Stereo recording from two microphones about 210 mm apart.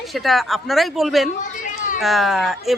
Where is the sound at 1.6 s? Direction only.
40° left (ahead or behind).